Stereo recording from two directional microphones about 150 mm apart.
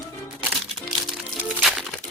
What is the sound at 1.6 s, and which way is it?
Music, centre (ahead or behind).